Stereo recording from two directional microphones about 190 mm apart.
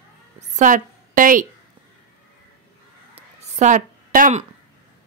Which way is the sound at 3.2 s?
40° right (ahead or behind).